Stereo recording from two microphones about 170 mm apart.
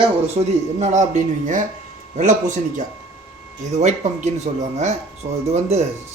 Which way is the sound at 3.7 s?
40° right (ahead or behind).